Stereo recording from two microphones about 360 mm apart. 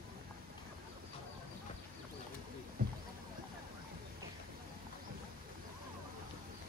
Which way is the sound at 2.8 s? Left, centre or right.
Right.